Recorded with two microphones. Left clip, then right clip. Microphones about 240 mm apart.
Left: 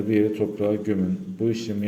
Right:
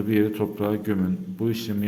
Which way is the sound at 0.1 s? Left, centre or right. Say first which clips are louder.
Left 2 dB; right.